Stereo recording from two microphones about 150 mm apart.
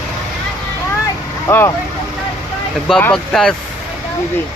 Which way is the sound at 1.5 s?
20° left (ahead or behind).